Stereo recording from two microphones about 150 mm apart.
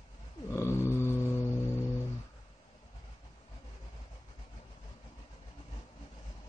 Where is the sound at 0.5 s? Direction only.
15° left (ahead or behind).